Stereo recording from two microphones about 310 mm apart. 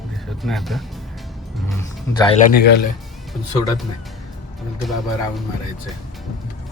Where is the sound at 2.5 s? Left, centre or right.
Left.